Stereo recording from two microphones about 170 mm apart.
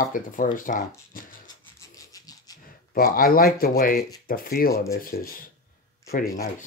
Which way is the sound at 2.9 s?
60° left (ahead or behind).